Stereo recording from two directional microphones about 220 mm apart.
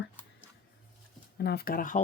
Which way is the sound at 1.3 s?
45° left (ahead or behind).